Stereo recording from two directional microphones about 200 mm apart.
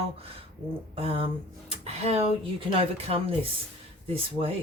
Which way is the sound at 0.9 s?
30° right (ahead or behind).